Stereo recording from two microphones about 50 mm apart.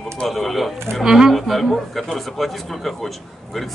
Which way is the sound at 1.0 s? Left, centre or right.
Centre.